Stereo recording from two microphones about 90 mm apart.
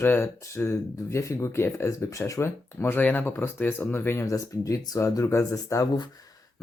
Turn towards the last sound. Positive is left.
turn(degrees=40)  # may be behind; listen again after turning